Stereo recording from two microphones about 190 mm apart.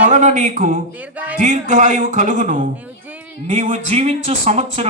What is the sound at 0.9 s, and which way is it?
Speech, 10° right (ahead or behind).